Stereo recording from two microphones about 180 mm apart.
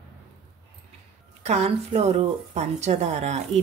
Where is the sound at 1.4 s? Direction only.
40° right (ahead or behind).